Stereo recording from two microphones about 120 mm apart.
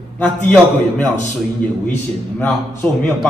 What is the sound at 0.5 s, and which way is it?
Speech, 10° left (ahead or behind).